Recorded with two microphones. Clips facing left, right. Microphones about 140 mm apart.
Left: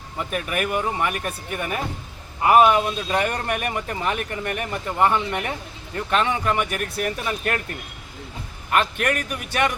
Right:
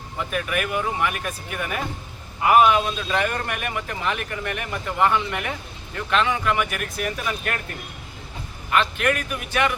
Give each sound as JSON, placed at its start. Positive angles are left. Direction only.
{"t": 0.3, "sound": "a man's voice", "side_deg": 40}
{"t": 8.7, "sound": "speech", "side_deg": 45}